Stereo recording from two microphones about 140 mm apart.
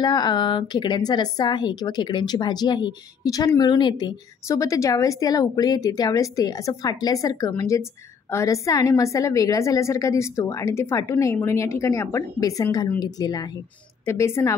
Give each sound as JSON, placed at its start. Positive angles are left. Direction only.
{"t": 0.0, "sound": "a woman's voice", "side_deg": 30}
{"t": 4.5, "sound": "a woman's voice", "side_deg": 20}